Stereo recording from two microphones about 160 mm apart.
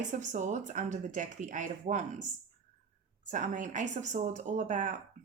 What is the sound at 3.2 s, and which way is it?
A woman's voice, 50° right (ahead or behind).